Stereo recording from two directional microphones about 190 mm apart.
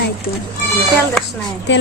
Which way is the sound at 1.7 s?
65° left (ahead or behind).